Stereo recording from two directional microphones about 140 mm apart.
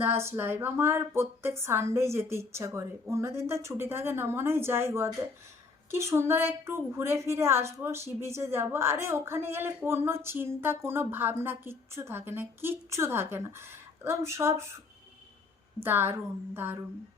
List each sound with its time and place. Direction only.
0.2 s a woman's voice: 15° right (ahead or behind)
15.8 s a woman's voice: 15° right (ahead or behind)